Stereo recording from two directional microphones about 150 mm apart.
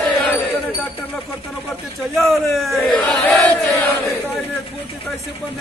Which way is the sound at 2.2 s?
Centre (ahead or behind).